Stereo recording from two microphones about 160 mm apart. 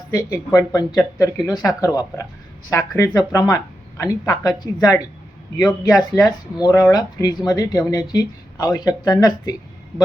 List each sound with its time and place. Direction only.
0.1 s speech: 20° left (ahead or behind)